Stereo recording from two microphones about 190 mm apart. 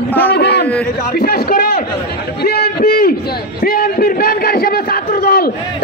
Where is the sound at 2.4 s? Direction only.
55° left (ahead or behind).